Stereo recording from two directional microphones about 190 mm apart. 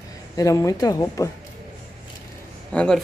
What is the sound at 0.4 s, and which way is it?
Speech, 15° left (ahead or behind).